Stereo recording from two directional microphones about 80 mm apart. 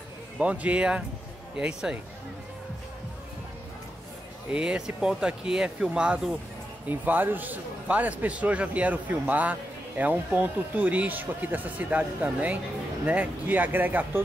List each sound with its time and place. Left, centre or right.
0.4 s speech: centre
4.5 s speech: centre
6.9 s a man's voice: right